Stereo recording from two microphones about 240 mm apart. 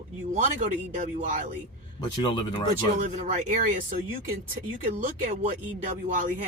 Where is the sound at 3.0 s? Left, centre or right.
Right.